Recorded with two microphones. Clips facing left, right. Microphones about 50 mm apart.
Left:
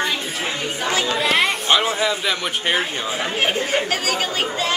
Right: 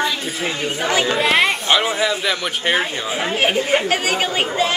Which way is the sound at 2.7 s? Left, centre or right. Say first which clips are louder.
Right 3 dB; centre.